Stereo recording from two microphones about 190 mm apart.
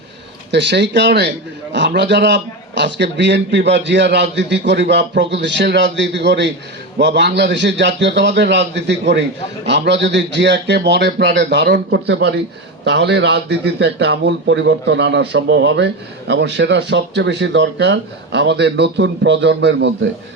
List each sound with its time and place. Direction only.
0.5 s a man's voice: 65° right (ahead or behind)